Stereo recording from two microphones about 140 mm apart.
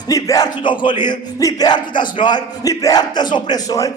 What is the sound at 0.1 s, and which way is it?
Speech, 25° left (ahead or behind).